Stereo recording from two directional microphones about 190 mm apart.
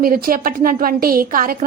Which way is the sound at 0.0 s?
50° right (ahead or behind).